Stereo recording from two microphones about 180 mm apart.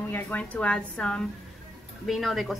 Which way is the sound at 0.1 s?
10° left (ahead or behind).